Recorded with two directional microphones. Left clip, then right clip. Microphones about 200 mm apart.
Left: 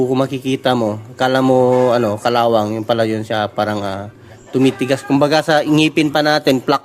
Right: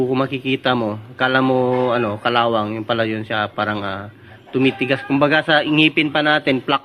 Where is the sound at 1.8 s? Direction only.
25° left (ahead or behind).